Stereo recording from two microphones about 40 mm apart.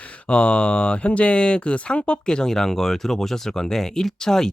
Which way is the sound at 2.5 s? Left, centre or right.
Centre.